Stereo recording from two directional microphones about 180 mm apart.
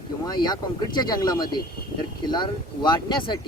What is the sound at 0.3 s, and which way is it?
Speech, 20° left (ahead or behind).